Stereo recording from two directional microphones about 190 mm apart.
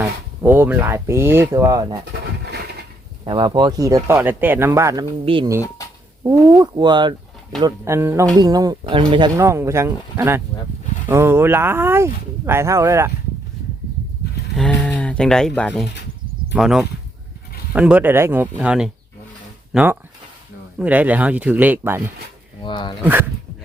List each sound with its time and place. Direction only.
0.0 s speech: 10° right (ahead or behind)
2.4 s a sound: 60° right (ahead or behind)
3.2 s speech: 25° right (ahead or behind)
5.2 s speech: 25° right (ahead or behind)
14.5 s speech: centre (ahead or behind)
22.6 s speech: 25° left (ahead or behind)